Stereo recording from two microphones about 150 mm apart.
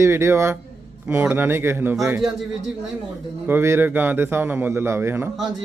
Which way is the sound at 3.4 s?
15° right (ahead or behind).